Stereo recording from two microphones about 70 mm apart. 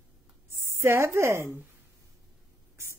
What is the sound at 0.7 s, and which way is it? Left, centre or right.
Speech, right.